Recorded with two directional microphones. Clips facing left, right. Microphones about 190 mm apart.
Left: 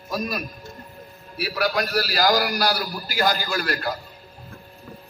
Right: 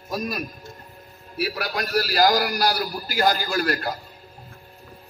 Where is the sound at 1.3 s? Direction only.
50° right (ahead or behind).